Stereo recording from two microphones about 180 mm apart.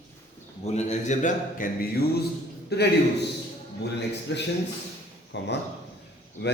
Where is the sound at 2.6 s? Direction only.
65° left (ahead or behind).